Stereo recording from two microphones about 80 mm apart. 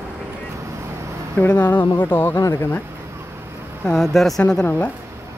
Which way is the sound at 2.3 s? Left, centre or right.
Left.